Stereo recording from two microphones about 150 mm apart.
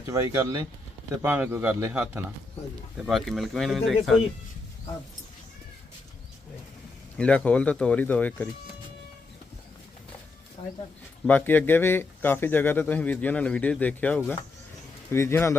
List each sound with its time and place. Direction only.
0.1 s speech: 20° right (ahead or behind)
1.2 s speech: 10° right (ahead or behind)
3.1 s speech: centre (ahead or behind)
7.2 s speech: 10° left (ahead or behind)
10.6 s speech: 35° left (ahead or behind)
11.3 s speech: 10° left (ahead or behind)